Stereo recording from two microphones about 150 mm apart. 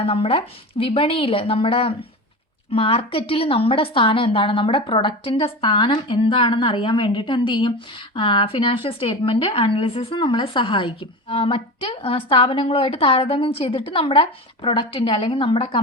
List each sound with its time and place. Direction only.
0.0 s a woman's voice: 40° left (ahead or behind)